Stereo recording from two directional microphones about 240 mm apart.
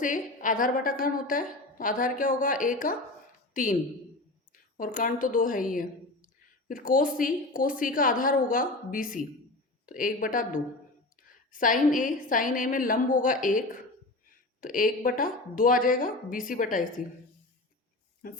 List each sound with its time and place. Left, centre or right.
0.0 s a woman's voice: left
4.8 s speech: left